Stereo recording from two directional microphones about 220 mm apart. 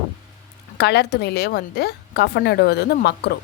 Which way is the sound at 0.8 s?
50° left (ahead or behind).